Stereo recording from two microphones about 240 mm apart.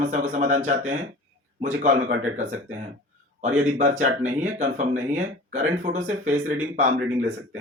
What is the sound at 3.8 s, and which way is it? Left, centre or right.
Speech, right.